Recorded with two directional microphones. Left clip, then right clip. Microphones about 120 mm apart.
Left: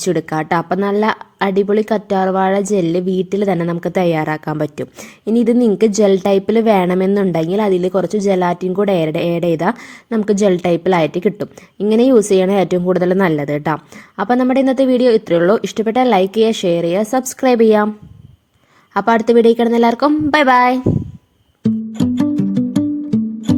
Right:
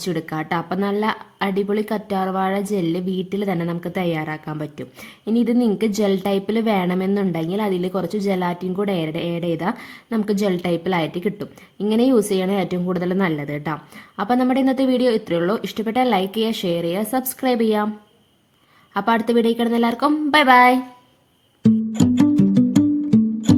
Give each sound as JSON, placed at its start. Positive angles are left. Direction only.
{"t": 0.0, "sound": "a woman's voice", "side_deg": 35}
{"t": 5.2, "sound": "a woman's voice", "side_deg": 35}
{"t": 14.2, "sound": "a woman's voice", "side_deg": 30}
{"t": 18.9, "sound": "a woman's voice", "side_deg": 30}
{"t": 21.6, "sound": "music", "side_deg": 0}